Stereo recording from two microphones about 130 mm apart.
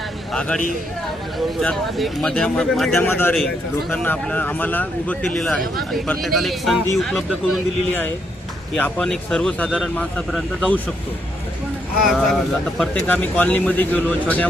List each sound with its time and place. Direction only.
0.3 s speech: 10° left (ahead or behind)
3.0 s speech: 15° left (ahead or behind); by 7.6 s centre (ahead or behind)
8.8 s speech: 5° left (ahead or behind)
12.0 s speech: centre (ahead or behind)